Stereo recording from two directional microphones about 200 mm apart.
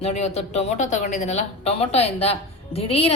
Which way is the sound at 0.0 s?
30° left (ahead or behind).